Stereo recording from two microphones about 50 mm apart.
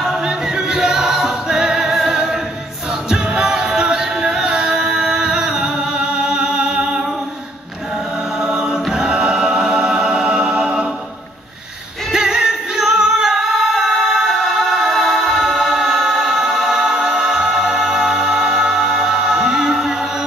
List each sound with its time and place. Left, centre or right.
0.0 s choir: centre
3.1 s music: centre
8.4 s choir: centre
12.1 s music: centre
14.2 s choir: centre